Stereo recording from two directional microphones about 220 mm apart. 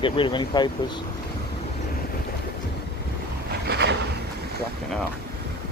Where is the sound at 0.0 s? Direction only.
20° left (ahead or behind).